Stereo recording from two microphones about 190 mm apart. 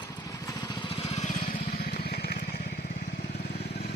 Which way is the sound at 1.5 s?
55° left (ahead or behind).